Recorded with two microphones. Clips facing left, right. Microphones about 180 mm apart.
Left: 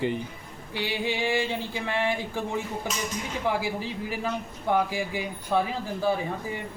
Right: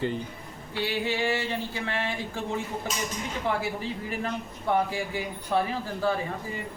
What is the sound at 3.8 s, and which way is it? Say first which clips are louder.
Speech: left 1 dB; 10° left (ahead or behind).